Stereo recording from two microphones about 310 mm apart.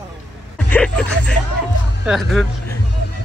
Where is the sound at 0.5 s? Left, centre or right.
Centre.